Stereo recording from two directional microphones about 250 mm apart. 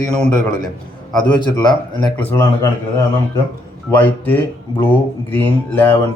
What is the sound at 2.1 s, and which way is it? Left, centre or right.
Speech, centre.